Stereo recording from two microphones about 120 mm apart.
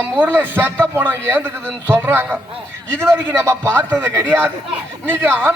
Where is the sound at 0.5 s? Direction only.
15° right (ahead or behind).